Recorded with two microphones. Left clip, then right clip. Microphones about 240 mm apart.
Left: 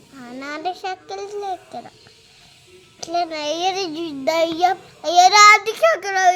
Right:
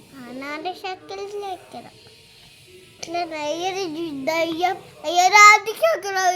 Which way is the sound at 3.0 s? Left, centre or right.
Left.